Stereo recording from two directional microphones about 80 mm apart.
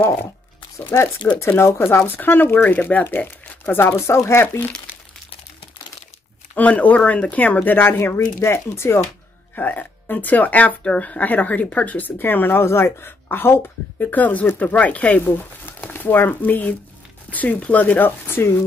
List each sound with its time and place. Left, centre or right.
0.9 s speech: left
6.5 s speech: centre
9.6 s speech: left